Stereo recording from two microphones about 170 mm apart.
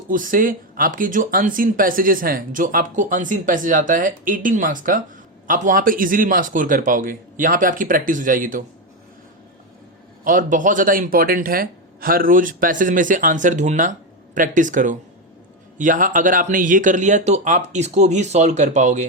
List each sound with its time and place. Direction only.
0.1 s speech: 55° right (ahead or behind)
10.2 s speech: 50° right (ahead or behind)